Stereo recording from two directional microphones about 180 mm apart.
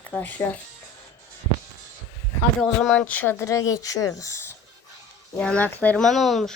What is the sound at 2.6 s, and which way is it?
Speech, 5° left (ahead or behind).